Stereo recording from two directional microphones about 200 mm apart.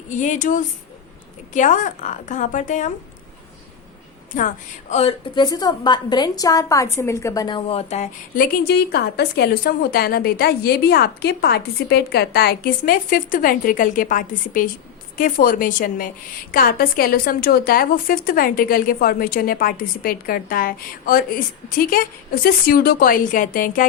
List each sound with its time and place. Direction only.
0.1 s a woman's voice: 40° left (ahead or behind)
4.3 s a woman's voice: 40° left (ahead or behind)
8.4 s a woman's voice: 50° left (ahead or behind)